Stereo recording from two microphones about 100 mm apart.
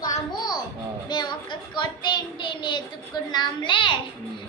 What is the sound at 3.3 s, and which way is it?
Speech, 50° left (ahead or behind).